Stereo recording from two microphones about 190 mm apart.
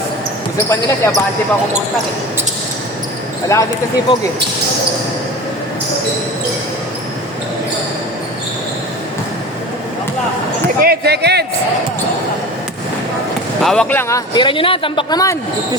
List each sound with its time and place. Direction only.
0.7 s speech: 15° left (ahead or behind)
3.5 s speech: 15° left (ahead or behind)
10.8 s speech: 55° right (ahead or behind)
13.6 s speech: 5° left (ahead or behind)
14.1 s speech: 25° left (ahead or behind)